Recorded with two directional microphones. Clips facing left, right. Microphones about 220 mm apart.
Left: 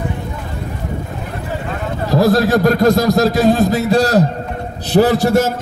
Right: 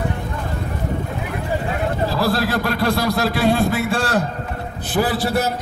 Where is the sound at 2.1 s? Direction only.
45° left (ahead or behind).